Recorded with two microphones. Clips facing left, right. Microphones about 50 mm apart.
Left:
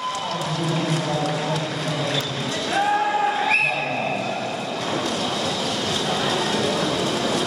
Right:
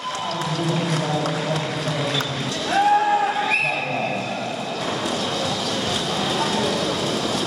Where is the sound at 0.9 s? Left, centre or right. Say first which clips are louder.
Even; centre.